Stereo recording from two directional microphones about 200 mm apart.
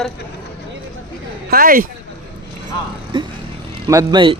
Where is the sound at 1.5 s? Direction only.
45° right (ahead or behind).